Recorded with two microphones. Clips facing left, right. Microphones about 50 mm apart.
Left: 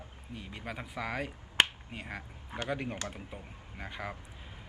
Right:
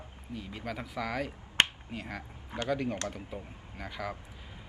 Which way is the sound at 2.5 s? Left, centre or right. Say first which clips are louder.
Right 4 dB; centre.